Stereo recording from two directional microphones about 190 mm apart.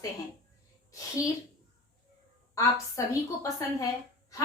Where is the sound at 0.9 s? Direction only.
15° left (ahead or behind).